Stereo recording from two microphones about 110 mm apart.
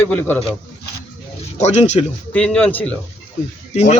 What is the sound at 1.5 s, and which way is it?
Speech, 90° left.